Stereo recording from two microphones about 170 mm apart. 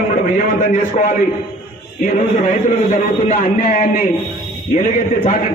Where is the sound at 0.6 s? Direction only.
45° left (ahead or behind).